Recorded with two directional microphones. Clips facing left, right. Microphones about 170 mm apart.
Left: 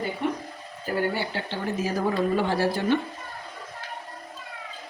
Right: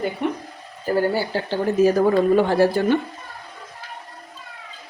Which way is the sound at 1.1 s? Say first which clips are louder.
Right 7 dB; 40° right (ahead or behind).